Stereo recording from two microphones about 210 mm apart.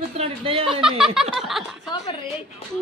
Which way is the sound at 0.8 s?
5° right (ahead or behind).